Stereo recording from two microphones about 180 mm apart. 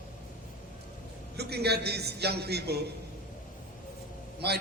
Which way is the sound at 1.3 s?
65° right (ahead or behind).